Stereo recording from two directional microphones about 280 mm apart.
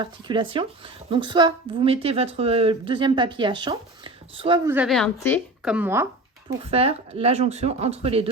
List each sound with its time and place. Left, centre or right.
0.0 s speech: centre
6.5 s speech: right